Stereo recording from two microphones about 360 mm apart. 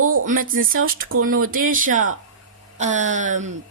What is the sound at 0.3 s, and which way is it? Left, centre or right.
Speech, right.